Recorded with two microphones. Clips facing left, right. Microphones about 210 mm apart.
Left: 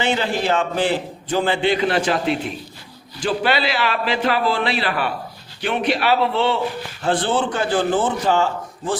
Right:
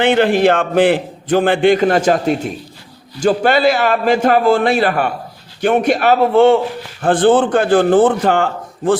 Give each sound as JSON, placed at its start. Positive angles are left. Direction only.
{"t": 0.0, "sound": "a man's voice", "side_deg": -60}